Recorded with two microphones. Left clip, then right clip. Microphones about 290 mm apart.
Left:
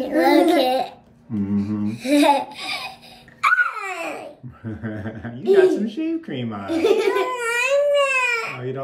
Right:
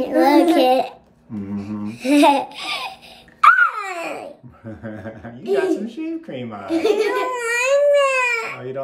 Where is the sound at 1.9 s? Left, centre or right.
Right.